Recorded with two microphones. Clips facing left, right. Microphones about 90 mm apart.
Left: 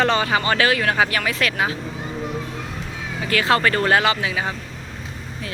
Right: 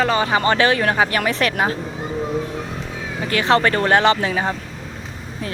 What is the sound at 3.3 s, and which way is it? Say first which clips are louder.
Speech: right 2 dB; 25° right (ahead or behind).